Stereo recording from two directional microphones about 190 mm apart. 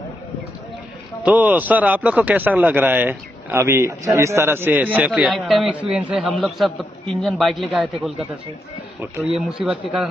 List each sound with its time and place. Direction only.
1.2 s a man's voice: 10° right (ahead or behind)